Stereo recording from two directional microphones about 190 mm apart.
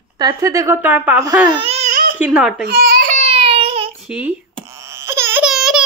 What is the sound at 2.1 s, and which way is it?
Speech, 5° right (ahead or behind).